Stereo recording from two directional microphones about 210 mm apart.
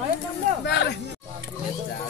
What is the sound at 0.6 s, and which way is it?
Speech, 55° left (ahead or behind).